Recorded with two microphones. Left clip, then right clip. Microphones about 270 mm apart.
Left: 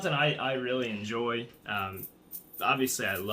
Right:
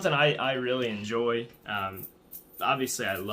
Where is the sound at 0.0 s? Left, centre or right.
Right.